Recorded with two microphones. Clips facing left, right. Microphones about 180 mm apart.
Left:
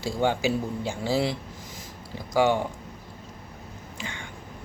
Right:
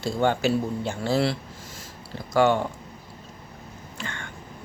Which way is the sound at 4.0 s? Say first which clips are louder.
Right 2 dB; 15° left (ahead or behind).